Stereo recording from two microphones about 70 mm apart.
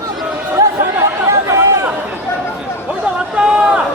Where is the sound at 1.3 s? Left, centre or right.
Right.